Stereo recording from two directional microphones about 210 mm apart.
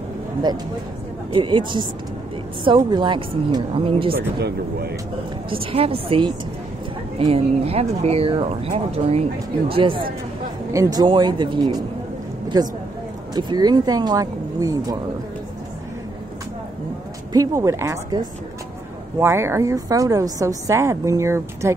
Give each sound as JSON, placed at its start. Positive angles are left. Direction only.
{"t": 1.3, "sound": "speech", "side_deg": -25}
{"t": 4.1, "sound": "speech", "side_deg": -50}
{"t": 5.5, "sound": "speech", "side_deg": -25}
{"t": 17.3, "sound": "a woman's voice", "side_deg": -15}